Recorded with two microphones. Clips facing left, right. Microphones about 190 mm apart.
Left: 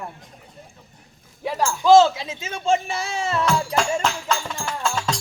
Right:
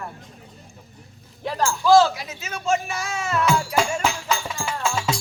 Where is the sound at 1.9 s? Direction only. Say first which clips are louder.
Left 3 dB; 25° left (ahead or behind).